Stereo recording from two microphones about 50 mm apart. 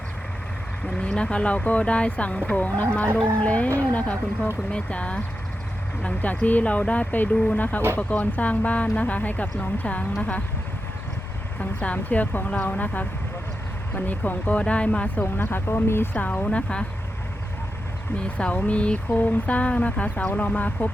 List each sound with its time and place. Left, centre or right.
0.9 s speech: centre
11.6 s speech: left
16.1 s speech: left
18.2 s speech: left